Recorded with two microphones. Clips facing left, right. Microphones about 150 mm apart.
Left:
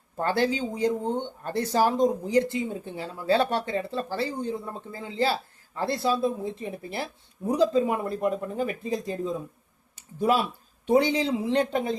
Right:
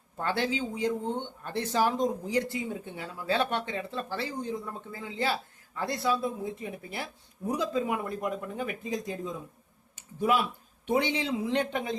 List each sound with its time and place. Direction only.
0.2 s speech: 40° left (ahead or behind)
9.9 s a sound: 35° left (ahead or behind)
10.8 s speech: 35° left (ahead or behind)